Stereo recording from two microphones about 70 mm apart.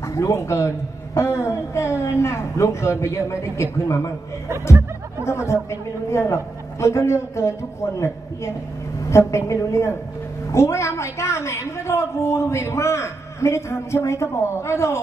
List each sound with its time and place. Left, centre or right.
0.0 s a woman's voice: left
5.2 s a woman's voice: left
9.1 s a woman's voice: left